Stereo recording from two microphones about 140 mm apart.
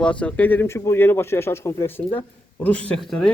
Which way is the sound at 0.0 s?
10° left (ahead or behind).